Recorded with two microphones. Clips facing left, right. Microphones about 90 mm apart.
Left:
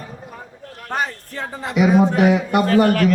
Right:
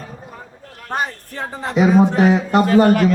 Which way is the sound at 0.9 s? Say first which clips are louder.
Right 1 dB; 15° right (ahead or behind).